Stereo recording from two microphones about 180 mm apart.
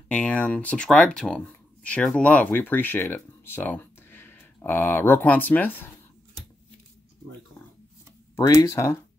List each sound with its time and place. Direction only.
0.1 s speech: 5° left (ahead or behind)
8.4 s speech: 20° left (ahead or behind)